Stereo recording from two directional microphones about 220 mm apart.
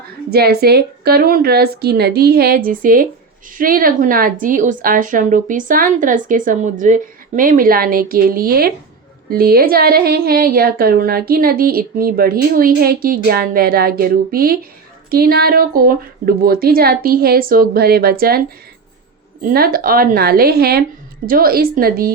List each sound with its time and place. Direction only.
0.3 s a woman's voice: 45° right (ahead or behind)